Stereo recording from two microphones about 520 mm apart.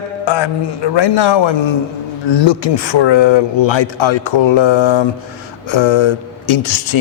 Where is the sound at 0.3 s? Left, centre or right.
Left.